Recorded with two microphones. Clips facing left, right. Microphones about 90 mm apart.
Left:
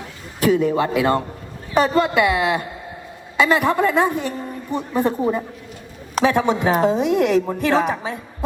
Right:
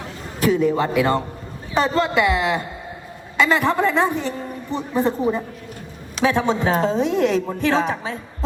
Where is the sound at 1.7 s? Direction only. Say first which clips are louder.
Left 2 dB; 15° left (ahead or behind).